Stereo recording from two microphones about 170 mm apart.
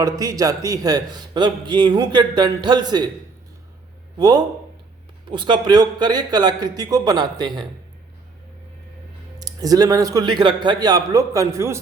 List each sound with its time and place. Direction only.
0.0 s a man's voice: 20° right (ahead or behind)
4.2 s a man's voice: 25° right (ahead or behind)
9.4 s a man's voice: 20° right (ahead or behind)